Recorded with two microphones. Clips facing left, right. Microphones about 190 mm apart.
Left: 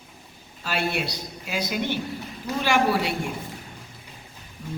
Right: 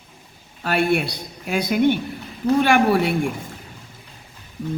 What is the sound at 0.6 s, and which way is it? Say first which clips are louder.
Speech: right 7 dB; 55° right (ahead or behind).